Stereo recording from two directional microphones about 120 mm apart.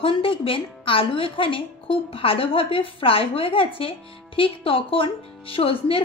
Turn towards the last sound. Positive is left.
turn(degrees=50)  # may be behind; listen again after turning